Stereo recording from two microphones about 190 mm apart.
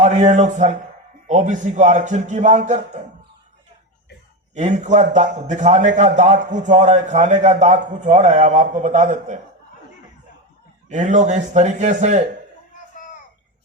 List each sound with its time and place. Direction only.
0.0 s a man's voice: 35° right (ahead or behind)
4.5 s a man's voice: 40° right (ahead or behind)
10.8 s a man's voice: 40° right (ahead or behind)